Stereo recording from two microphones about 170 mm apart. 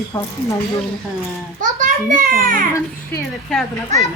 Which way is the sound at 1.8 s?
50° right (ahead or behind).